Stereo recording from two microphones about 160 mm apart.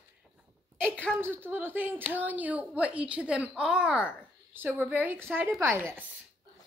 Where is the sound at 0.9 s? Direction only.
10° left (ahead or behind).